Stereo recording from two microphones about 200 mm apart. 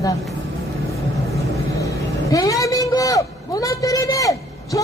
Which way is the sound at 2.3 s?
15° left (ahead or behind).